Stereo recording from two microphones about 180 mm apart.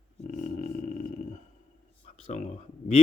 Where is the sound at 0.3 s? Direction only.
45° left (ahead or behind).